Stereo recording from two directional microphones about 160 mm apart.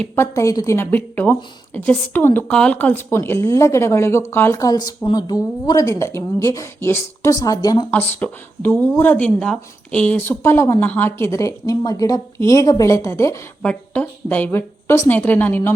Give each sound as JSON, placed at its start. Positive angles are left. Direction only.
{"t": 0.0, "sound": "speech", "side_deg": 15}
{"t": 7.9, "sound": "speech", "side_deg": 10}